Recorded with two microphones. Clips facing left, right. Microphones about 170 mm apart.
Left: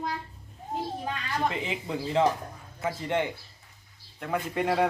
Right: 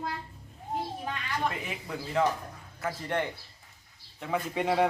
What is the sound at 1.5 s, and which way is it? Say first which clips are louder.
Speech: left 5 dB; 25° left (ahead or behind).